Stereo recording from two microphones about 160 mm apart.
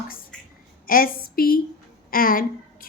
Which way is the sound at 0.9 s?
65° left (ahead or behind).